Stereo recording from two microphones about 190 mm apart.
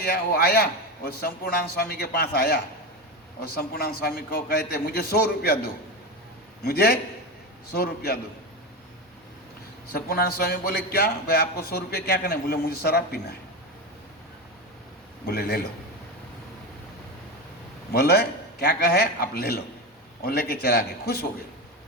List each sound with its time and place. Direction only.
0.0 s a man's voice: 55° left (ahead or behind)
3.6 s a man's voice: 55° left (ahead or behind)
6.7 s a man's voice: 55° left (ahead or behind)
9.9 s a man's voice: 55° left (ahead or behind)
15.3 s a man's voice: 55° left (ahead or behind)
17.9 s a man's voice: 55° left (ahead or behind)